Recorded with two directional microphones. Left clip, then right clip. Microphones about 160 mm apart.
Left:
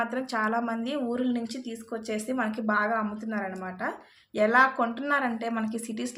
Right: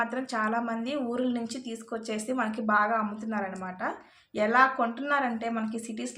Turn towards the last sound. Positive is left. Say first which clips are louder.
# left 2 dB
turn(degrees=25)  # may be behind; listen again after turning